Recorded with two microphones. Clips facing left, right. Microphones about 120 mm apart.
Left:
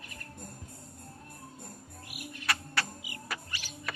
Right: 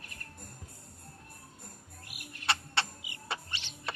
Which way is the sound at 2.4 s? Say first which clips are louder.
Right 1 dB; 25° right (ahead or behind).